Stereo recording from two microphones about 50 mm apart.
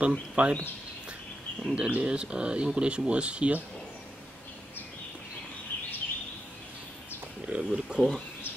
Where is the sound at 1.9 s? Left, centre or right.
Right.